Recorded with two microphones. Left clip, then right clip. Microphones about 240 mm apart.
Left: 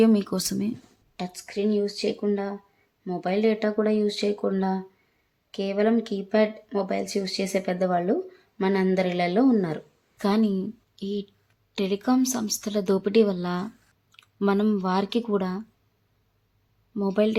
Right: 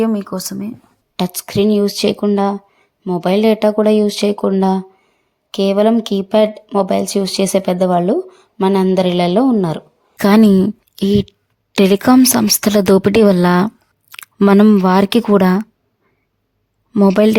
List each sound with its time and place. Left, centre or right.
0.0 s speech: centre
1.1 s speech: right
10.2 s speech: right
16.9 s speech: right